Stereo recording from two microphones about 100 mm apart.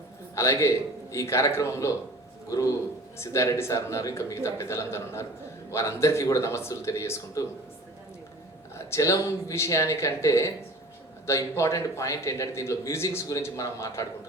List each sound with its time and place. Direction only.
0.3 s a man's voice: 30° left (ahead or behind)
8.7 s a man's voice: 30° left (ahead or behind)